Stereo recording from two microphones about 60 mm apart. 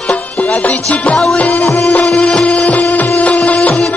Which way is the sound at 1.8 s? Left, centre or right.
Centre.